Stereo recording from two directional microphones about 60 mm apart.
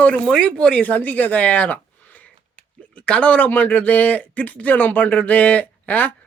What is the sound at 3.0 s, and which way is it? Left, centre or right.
Speech, left.